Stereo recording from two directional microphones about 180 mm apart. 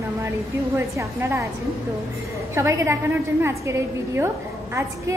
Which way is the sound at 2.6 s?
15° right (ahead or behind).